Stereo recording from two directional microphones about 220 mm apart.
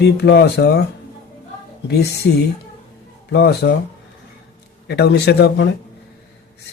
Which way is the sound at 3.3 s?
50° left (ahead or behind).